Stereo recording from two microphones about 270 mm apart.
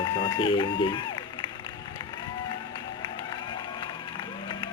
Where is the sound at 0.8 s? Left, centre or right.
Centre.